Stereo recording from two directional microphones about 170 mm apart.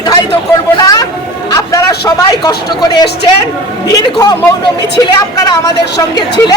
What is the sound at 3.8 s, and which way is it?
A woman's voice, 20° left (ahead or behind).